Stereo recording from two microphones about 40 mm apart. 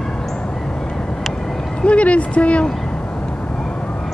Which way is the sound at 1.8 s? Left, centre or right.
Left.